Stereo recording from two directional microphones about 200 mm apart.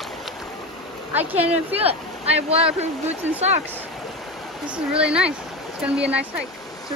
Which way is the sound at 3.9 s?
Centre (ahead or behind).